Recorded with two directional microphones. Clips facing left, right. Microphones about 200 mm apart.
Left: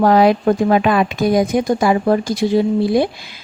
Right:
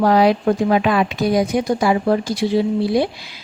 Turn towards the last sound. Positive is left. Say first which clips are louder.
# left 2 dB
turn(degrees=50)  # may be behind; listen again after turning